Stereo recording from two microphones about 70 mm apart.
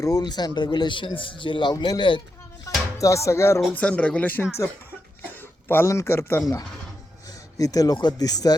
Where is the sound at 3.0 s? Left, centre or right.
Left.